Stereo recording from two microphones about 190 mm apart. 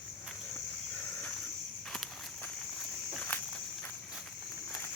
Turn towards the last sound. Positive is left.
turn(degrees=0)  # may be behind; listen again after turning